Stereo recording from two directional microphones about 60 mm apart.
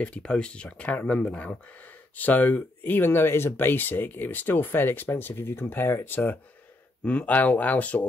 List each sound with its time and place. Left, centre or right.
0.0 s speech: centre